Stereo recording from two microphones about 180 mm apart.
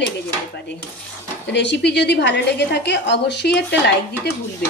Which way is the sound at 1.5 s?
75° left (ahead or behind).